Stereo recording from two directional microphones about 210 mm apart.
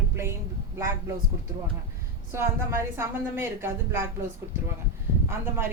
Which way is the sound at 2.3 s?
10° right (ahead or behind).